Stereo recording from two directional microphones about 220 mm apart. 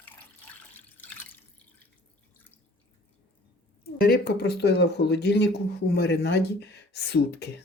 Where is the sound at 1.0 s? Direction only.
10° left (ahead or behind).